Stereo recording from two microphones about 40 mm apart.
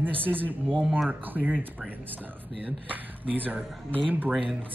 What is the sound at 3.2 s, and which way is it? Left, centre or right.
Speech, right.